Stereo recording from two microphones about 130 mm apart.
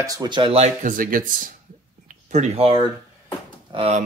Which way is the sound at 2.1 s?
65° right (ahead or behind).